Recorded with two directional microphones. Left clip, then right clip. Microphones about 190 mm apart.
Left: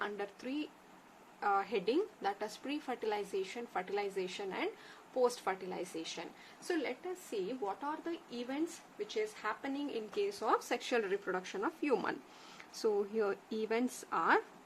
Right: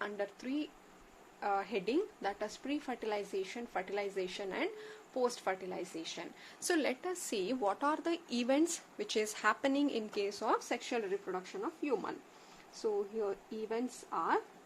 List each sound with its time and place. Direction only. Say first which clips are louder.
0.0 s a woman's voice: right 1 dB; 15° right (ahead or behind)
6.7 s a woman's voice: right 4 dB; 45° right (ahead or behind)
10.4 s speech: left 1 dB; 15° right (ahead or behind); by 14.4 s 15° left (ahead or behind)